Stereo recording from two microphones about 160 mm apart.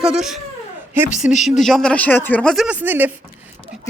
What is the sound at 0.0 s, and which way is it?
Speech, 5° right (ahead or behind).